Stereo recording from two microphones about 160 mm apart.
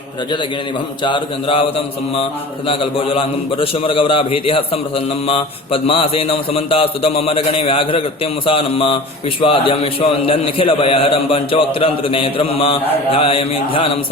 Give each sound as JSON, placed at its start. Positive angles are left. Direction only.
{"t": 1.0, "sound": "a man's voice", "side_deg": 30}